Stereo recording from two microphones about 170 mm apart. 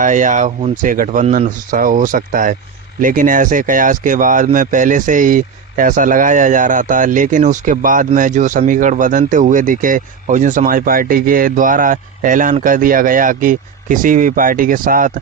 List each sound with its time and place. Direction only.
0.0 s speech: 50° right (ahead or behind)